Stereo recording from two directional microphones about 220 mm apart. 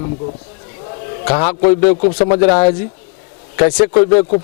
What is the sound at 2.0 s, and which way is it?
Speech, 35° left (ahead or behind).